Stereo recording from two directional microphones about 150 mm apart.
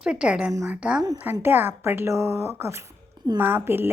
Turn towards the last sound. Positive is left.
turn(degrees=-15)  # may be behind; listen again after turning